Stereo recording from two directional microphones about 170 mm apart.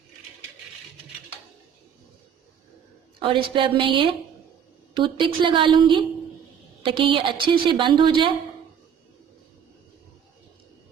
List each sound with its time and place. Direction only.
3.2 s a woman's voice: 30° right (ahead or behind)
5.4 s a woman's voice: 30° right (ahead or behind)